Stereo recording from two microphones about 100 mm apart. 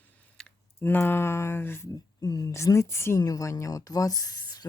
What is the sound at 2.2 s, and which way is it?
A woman's voice, 40° left (ahead or behind).